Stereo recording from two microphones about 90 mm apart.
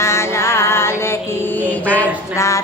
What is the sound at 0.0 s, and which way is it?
Mantra, 30° left (ahead or behind).